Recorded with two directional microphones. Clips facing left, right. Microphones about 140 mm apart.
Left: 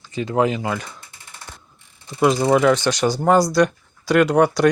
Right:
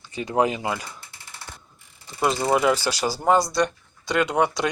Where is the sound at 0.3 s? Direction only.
20° right (ahead or behind).